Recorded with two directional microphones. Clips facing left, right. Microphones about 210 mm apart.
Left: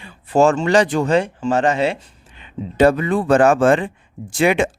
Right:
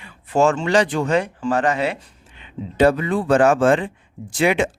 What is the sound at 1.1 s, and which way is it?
Speech, 25° left (ahead or behind).